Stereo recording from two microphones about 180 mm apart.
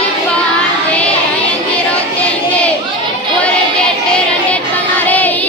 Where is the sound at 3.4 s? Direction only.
5° left (ahead or behind).